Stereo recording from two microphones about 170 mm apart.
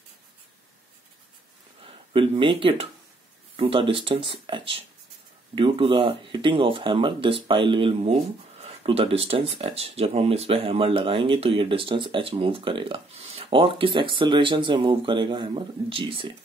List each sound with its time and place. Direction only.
1.9 s speech: 30° right (ahead or behind)